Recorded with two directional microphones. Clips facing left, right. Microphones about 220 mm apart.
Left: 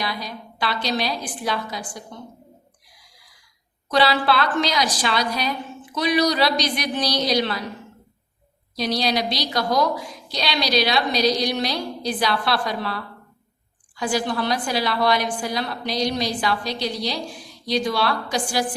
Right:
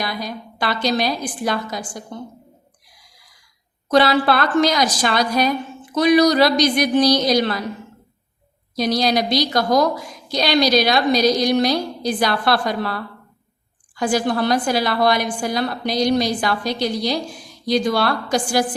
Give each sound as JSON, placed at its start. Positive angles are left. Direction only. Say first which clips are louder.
{"t": 0.0, "sound": "a woman's voice", "louder": "right 3 dB", "side_deg": -50}
{"t": 3.8, "sound": "a woman's voice", "louder": "right 4 dB", "side_deg": -45}
{"t": 8.7, "sound": "a woman's voice", "louder": "right 4 dB", "side_deg": -45}
{"t": 13.9, "sound": "a woman's voice", "louder": "right 4 dB", "side_deg": -50}